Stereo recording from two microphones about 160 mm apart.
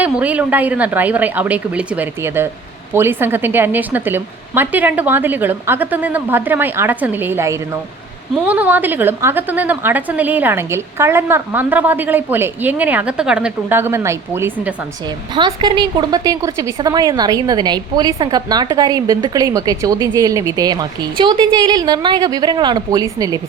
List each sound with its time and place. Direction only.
0.0 s a woman's voice: 10° right (ahead or behind)
15.4 s a woman's voice: 30° right (ahead or behind)